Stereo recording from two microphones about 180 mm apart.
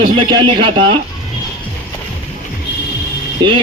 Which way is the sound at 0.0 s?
25° right (ahead or behind).